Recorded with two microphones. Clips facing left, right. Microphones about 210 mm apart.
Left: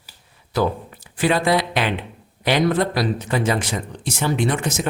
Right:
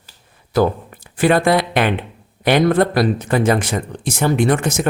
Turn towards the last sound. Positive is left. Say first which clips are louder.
# right 5 dB
turn(degrees=-55)  # may be behind; listen again after turning